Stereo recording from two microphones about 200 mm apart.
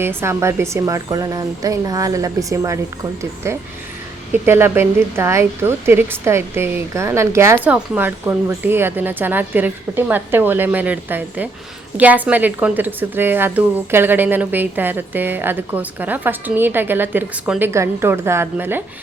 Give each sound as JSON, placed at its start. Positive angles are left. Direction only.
{"t": 0.0, "sound": "speech", "side_deg": -10}